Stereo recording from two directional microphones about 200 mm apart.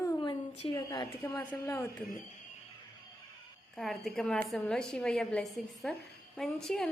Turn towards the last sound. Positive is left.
turn(degrees=0)  # may be behind; listen again after turning